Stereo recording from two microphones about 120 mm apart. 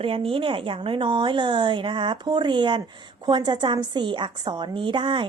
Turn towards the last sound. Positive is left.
turn(degrees=-45)  # may be behind; listen again after turning